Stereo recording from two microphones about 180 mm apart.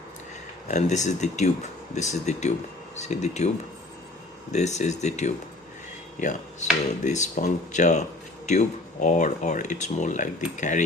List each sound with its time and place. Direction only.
0.7 s speech: 40° left (ahead or behind)
4.5 s speech: 40° left (ahead or behind)